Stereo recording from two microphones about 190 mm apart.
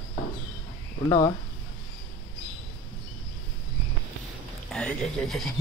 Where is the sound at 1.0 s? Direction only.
20° left (ahead or behind).